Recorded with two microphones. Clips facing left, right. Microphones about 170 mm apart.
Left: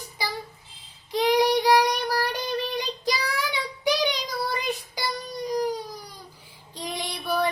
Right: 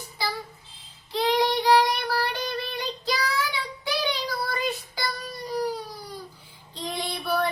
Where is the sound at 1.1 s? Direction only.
15° left (ahead or behind).